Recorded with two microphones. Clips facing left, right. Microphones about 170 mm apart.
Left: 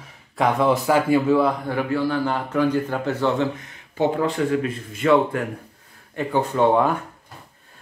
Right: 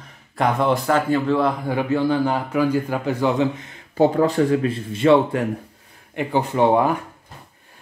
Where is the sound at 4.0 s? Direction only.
40° right (ahead or behind).